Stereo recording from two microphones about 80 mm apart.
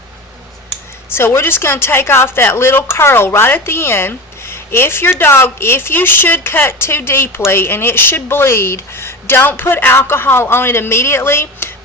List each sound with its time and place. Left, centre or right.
1.1 s speech: left